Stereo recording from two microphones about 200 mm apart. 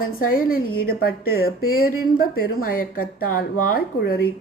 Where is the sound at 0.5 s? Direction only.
90° left.